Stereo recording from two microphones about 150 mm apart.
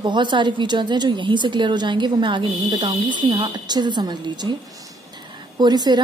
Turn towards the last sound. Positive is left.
turn(degrees=-30)  # may be behind; listen again after turning